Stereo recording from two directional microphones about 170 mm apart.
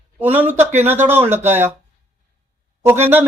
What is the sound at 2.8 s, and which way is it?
Speech, 15° right (ahead or behind).